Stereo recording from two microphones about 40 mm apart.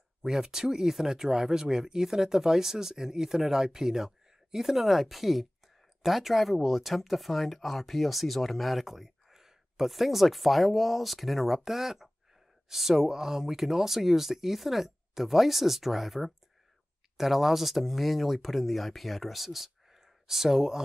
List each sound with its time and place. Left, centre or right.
0.2 s speech: centre